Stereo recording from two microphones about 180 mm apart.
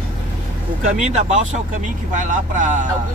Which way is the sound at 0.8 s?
40° right (ahead or behind).